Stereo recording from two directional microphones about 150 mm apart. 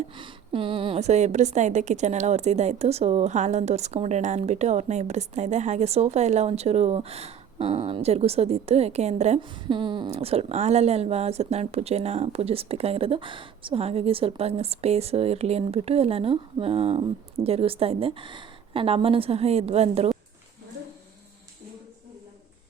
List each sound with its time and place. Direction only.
0.2 s a woman's voice: 35° right (ahead or behind)
9.6 s speech: 30° right (ahead or behind)